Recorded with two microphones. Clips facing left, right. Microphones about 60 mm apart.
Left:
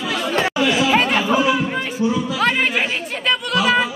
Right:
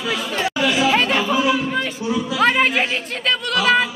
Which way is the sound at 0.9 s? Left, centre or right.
Centre.